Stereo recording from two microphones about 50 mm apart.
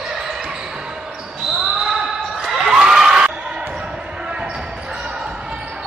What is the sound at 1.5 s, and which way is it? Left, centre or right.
Basketball bounce, centre.